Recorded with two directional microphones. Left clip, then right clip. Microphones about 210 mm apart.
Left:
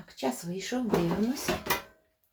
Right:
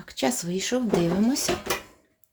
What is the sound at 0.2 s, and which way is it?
Speech, 60° right (ahead or behind).